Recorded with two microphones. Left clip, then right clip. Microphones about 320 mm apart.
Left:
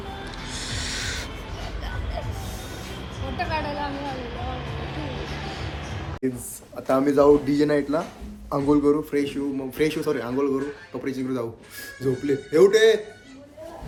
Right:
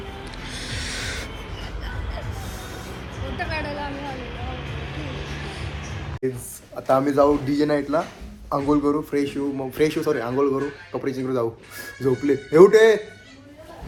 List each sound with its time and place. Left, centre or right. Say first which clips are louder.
3.3 s a sound: left 1 dB; left
4.4 s music: left 1 dB; left
6.2 s a man's voice: right 2 dB; centre
11.9 s speech: right 3 dB; centre